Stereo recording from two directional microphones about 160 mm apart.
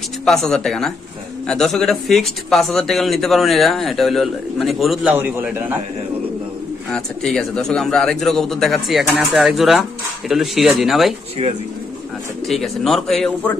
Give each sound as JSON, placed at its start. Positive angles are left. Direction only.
{"t": 0.2, "sound": "speech", "side_deg": 0}
{"t": 5.1, "sound": "a man's voice", "side_deg": -10}
{"t": 6.9, "sound": "speech", "side_deg": 5}
{"t": 11.4, "sound": "speech", "side_deg": -40}
{"t": 12.4, "sound": "speech", "side_deg": 0}